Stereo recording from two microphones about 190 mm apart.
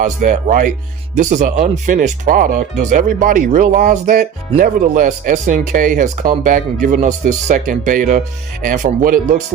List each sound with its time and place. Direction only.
0.0 s speech: 45° right (ahead or behind)